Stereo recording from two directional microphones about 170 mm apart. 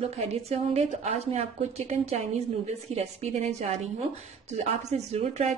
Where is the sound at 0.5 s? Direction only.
40° right (ahead or behind).